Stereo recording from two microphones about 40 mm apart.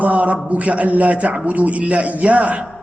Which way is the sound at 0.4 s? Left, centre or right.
Right.